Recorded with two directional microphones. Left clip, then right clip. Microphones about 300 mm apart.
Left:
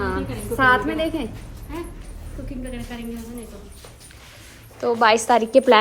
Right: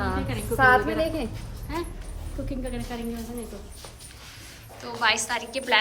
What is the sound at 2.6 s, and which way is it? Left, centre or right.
Speech, right.